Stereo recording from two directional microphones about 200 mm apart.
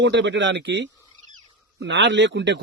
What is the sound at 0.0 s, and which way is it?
A man's voice, 60° right (ahead or behind).